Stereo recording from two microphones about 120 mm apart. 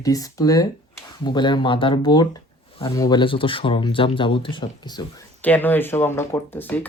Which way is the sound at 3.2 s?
45° left (ahead or behind).